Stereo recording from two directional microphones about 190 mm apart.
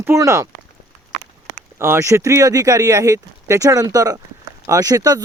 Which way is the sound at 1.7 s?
15° right (ahead or behind).